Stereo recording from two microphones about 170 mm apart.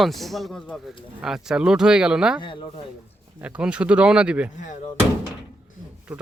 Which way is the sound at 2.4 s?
30° left (ahead or behind).